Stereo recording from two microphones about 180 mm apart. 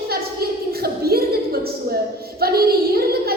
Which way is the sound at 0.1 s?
60° right (ahead or behind).